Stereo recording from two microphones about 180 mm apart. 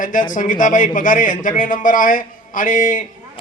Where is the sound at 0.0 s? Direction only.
45° left (ahead or behind).